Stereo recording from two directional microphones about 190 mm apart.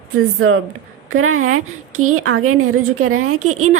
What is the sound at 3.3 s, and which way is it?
Speech, 40° right (ahead or behind).